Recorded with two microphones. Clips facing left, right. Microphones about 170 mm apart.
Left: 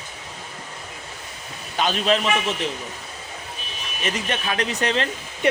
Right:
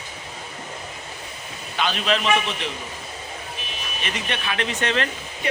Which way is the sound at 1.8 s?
40° left (ahead or behind).